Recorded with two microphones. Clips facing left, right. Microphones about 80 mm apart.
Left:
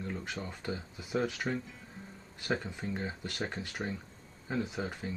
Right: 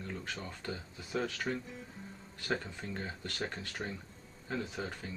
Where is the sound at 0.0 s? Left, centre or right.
Centre.